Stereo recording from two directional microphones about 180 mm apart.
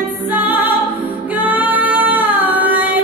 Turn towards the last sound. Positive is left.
turn(degrees=-10)  # may be behind; listen again after turning